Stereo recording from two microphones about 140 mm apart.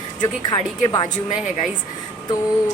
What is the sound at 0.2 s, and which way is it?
Speech, 30° left (ahead or behind).